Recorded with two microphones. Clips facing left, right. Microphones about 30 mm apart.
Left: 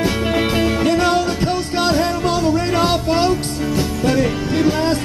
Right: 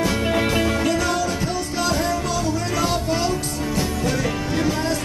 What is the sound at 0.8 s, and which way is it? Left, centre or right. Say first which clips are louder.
Music: left 5 dB; left.